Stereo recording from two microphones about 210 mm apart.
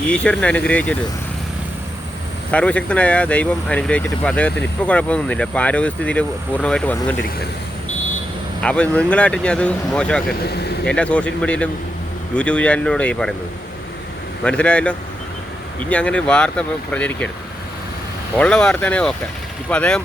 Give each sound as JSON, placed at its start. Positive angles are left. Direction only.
{"t": 0.1, "sound": "speech", "side_deg": 5}
{"t": 2.5, "sound": "speech", "side_deg": 5}
{"t": 8.6, "sound": "speech", "side_deg": 5}
{"t": 10.5, "sound": "speech", "side_deg": 50}
{"t": 10.8, "sound": "speech", "side_deg": 5}
{"t": 14.4, "sound": "speech", "side_deg": 5}
{"t": 18.3, "sound": "speech", "side_deg": 5}